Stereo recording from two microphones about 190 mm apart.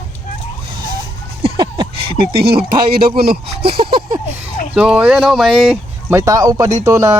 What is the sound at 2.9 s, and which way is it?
Speech, 50° right (ahead or behind).